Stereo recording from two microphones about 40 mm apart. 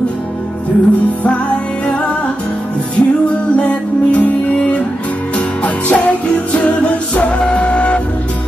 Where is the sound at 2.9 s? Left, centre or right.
Left.